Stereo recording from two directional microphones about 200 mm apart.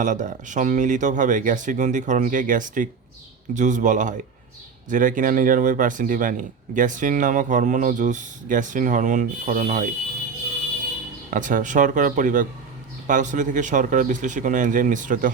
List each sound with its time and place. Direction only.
0.0 s speech: 40° right (ahead or behind)
11.3 s speech: 40° right (ahead or behind)